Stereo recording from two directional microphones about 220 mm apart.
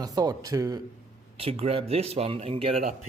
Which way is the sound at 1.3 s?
25° right (ahead or behind).